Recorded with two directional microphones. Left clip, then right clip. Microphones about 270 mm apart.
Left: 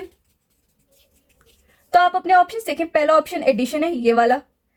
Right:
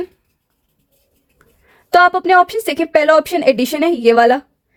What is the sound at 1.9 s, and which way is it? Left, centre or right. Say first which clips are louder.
Speech: right 5 dB; right.